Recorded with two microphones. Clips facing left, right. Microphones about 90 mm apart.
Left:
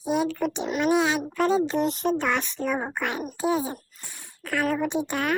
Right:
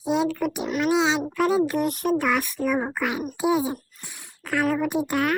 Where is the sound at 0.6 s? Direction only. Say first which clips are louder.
Right 1 dB; centre (ahead or behind).